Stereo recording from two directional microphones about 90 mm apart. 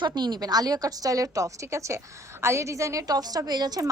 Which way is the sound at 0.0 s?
55° right (ahead or behind).